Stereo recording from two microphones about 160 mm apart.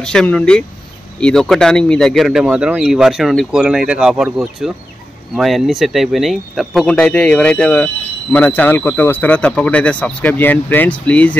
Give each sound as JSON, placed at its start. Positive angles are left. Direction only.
{"t": 0.0, "sound": "speech", "side_deg": 5}